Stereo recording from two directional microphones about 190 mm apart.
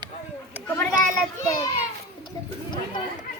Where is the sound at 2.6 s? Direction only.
25° left (ahead or behind).